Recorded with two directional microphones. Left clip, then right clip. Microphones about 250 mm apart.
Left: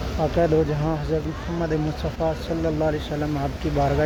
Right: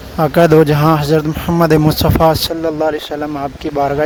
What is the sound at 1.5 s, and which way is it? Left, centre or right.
Speech, right.